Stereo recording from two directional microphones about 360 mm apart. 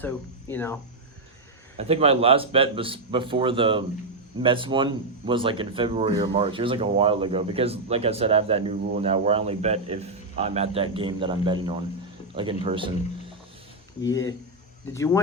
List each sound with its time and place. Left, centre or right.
0.0 s speech: centre
1.8 s speech: centre
14.0 s speech: left
14.9 s speech: centre